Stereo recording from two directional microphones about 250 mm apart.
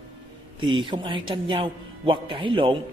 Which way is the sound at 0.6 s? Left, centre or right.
Centre.